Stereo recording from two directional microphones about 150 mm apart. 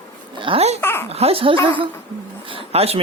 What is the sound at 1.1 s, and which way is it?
Speech, 40° right (ahead or behind).